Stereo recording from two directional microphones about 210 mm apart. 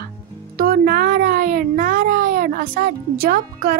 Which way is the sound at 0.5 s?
45° right (ahead or behind).